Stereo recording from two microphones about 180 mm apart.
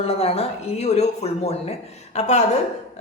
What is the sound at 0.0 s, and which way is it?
A woman's voice, 35° left (ahead or behind).